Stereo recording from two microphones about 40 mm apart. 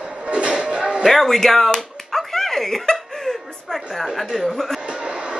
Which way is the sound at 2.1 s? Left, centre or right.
Centre.